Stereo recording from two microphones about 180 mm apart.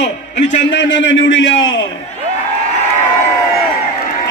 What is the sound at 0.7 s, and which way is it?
A man's voice, 90° left.